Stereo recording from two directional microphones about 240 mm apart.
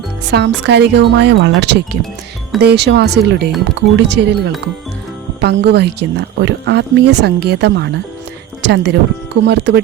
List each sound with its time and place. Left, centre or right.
0.3 s speech: right